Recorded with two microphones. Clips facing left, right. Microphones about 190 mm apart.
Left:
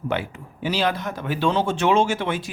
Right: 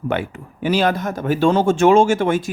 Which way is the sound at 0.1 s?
55° right (ahead or behind).